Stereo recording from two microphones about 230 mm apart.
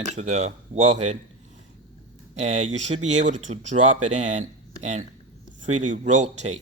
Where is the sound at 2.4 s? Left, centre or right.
Right.